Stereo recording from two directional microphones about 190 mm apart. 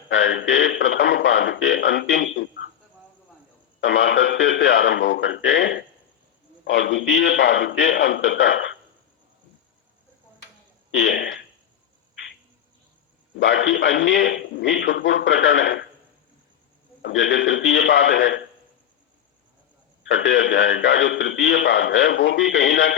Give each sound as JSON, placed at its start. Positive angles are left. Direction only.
{"t": 0.1, "sound": "a man's voice", "side_deg": 75}
{"t": 3.8, "sound": "a man's voice", "side_deg": 75}
{"t": 10.9, "sound": "speech", "side_deg": 65}
{"t": 13.4, "sound": "a man's voice", "side_deg": 75}
{"t": 17.0, "sound": "a man's voice", "side_deg": 75}
{"t": 20.1, "sound": "a man's voice", "side_deg": 85}